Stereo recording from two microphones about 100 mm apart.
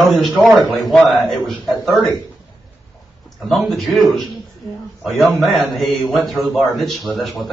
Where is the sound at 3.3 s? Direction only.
Centre (ahead or behind).